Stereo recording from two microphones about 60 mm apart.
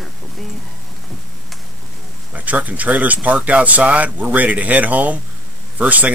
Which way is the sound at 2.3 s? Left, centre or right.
Right.